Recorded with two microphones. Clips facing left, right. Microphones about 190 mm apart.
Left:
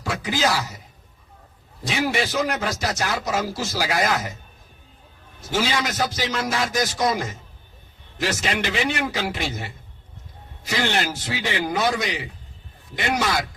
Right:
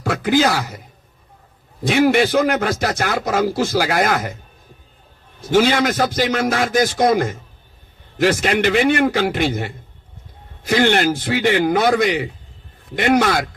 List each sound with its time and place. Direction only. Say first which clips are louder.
0.0 s speech: right 7 dB; 60° right (ahead or behind)
1.8 s a man's voice: right 9 dB; 55° right (ahead or behind)
5.4 s a man's voice: right 9 dB; 55° right (ahead or behind)